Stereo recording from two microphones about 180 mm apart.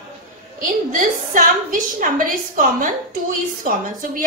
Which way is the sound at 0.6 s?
50° right (ahead or behind).